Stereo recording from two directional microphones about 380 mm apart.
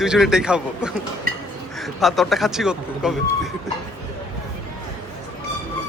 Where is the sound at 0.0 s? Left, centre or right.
Centre.